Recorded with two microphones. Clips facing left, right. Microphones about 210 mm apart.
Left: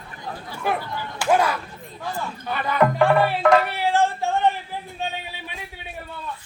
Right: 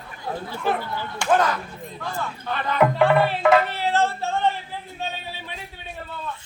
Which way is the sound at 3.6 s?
15° left (ahead or behind).